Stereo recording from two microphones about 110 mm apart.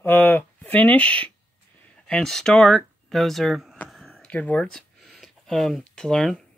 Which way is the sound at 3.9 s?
Centre (ahead or behind).